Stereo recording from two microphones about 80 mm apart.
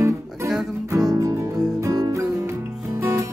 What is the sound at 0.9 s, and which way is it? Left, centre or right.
Music, right.